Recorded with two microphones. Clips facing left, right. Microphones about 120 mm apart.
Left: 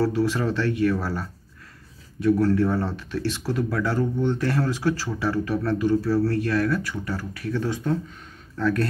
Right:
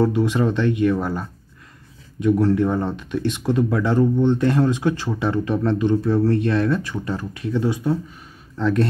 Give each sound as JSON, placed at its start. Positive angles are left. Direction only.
{"t": 0.0, "sound": "speech", "side_deg": -20}